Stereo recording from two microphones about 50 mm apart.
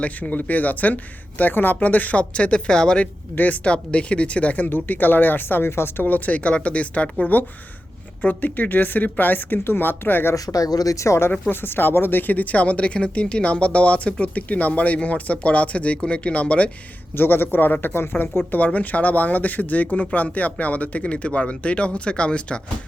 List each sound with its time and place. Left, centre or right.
0.0 s speech: left; by 3.1 s centre
3.3 s speech: left
4.7 s speech: left
6.1 s speech: left
10.9 s speech: left
11.3 s speech: left
17.2 s speech: left